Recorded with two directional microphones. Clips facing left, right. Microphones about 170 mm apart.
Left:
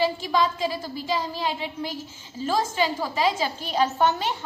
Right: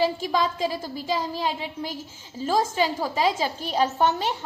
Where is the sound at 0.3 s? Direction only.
45° right (ahead or behind).